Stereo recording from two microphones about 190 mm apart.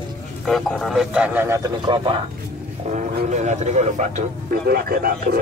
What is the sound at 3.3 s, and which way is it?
A man's voice, 40° right (ahead or behind).